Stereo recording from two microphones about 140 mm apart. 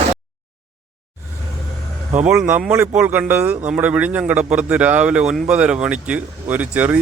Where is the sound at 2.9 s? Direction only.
10° right (ahead or behind).